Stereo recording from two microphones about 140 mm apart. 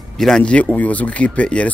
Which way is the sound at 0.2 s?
5° left (ahead or behind).